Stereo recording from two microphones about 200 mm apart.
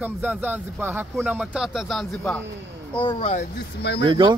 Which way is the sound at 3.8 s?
55° left (ahead or behind).